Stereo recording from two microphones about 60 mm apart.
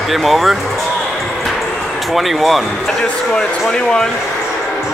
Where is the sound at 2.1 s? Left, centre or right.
Centre.